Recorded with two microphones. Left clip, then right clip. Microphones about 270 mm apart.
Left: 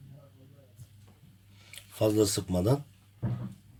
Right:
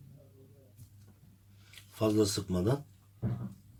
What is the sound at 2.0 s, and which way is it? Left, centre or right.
Speech, left.